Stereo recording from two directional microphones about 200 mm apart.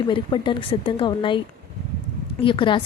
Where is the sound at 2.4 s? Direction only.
25° left (ahead or behind).